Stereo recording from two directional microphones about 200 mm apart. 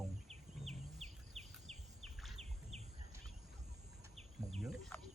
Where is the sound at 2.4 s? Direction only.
30° right (ahead or behind).